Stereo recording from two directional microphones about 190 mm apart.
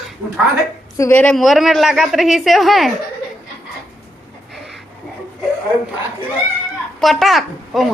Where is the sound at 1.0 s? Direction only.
10° left (ahead or behind).